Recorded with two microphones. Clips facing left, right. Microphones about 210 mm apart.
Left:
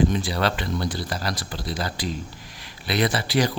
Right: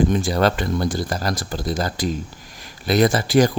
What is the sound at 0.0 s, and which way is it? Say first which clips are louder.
Speech: right 4 dB; 45° right (ahead or behind).